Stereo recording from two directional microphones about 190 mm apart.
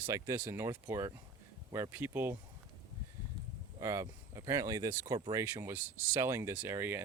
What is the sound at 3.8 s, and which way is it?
Speech, 15° right (ahead or behind).